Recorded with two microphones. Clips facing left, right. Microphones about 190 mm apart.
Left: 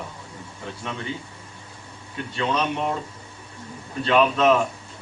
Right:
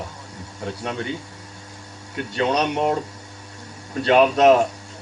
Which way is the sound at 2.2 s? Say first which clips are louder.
Right 4 dB; 70° right (ahead or behind).